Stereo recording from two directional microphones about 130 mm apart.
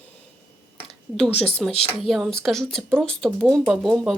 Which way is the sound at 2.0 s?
Centre (ahead or behind).